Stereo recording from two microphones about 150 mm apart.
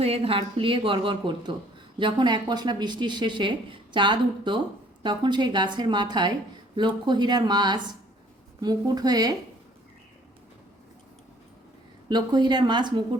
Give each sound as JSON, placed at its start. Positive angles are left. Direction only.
{"t": 0.0, "sound": "speech", "side_deg": -40}
{"t": 12.0, "sound": "speech", "side_deg": -30}